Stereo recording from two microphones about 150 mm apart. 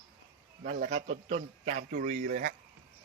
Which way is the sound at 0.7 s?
65° right (ahead or behind).